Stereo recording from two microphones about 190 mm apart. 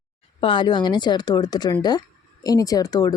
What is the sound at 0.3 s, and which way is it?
Speech, 25° left (ahead or behind).